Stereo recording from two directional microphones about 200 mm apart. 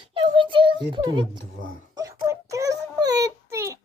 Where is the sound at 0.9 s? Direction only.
25° right (ahead or behind).